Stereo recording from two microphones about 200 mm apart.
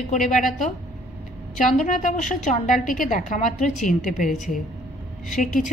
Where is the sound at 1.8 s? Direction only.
40° left (ahead or behind).